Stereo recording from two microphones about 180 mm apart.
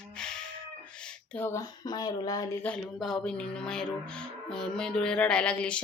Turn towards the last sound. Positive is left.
turn(degrees=5)  # may be behind; listen again after turning